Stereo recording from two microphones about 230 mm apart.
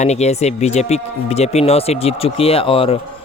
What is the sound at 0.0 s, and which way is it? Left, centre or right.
Speech, left.